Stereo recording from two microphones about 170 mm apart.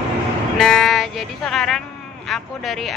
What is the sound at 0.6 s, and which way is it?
Music, 5° left (ahead or behind).